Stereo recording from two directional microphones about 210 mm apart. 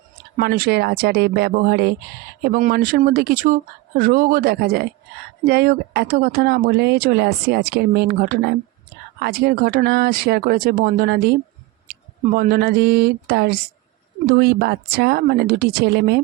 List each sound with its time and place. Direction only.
0.3 s speech: 45° right (ahead or behind)